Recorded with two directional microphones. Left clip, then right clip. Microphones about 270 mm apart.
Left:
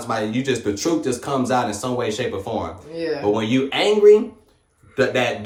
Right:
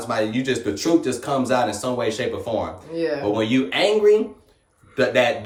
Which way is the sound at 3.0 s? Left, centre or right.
Centre.